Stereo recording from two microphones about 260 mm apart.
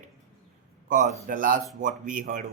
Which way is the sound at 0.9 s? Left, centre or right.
Right.